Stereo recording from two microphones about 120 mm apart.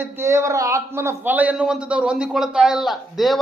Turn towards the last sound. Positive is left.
turn(degrees=0)  # may be behind; listen again after turning